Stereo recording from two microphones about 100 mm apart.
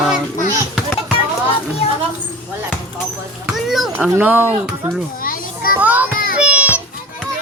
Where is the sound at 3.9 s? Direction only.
20° right (ahead or behind).